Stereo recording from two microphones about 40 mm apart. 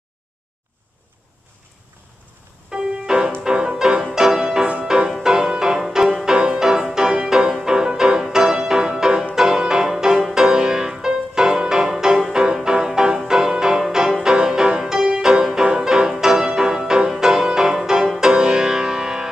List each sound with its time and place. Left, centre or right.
2.7 s music: centre